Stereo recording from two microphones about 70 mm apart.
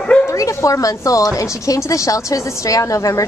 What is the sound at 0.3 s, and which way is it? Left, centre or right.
A woman's voice, left.